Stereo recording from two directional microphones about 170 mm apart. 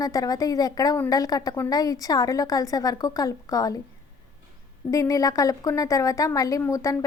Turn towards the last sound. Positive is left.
turn(degrees=15)  # may be behind; listen again after turning